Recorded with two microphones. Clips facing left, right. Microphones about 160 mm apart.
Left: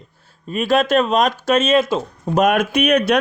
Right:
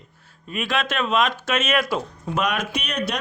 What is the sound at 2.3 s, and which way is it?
Speech, 50° left (ahead or behind).